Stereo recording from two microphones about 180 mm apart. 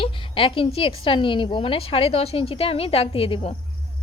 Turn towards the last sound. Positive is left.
turn(degrees=30)  # may be behind; listen again after turning